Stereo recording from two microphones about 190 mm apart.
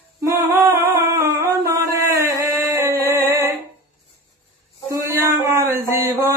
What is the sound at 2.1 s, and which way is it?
Singing, 15° right (ahead or behind).